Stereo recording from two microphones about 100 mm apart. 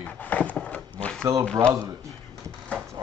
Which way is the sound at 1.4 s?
10° left (ahead or behind).